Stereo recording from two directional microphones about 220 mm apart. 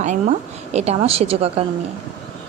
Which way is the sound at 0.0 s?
30° right (ahead or behind).